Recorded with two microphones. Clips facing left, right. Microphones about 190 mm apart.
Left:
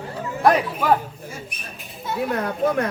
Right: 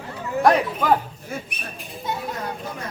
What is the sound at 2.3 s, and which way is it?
Speech, 60° left (ahead or behind).